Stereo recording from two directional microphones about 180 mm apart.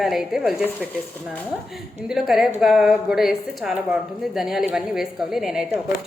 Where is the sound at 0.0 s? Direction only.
Centre (ahead or behind).